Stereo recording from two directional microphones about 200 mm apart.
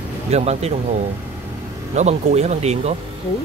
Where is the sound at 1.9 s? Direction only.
35° right (ahead or behind).